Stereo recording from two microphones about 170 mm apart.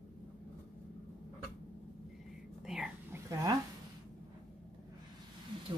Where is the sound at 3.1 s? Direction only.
20° right (ahead or behind).